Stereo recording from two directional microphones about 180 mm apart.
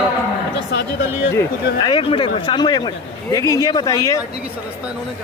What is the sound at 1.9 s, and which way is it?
Speech, 30° left (ahead or behind).